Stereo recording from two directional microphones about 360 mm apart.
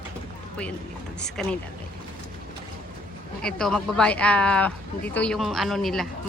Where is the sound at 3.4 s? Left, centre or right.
Centre.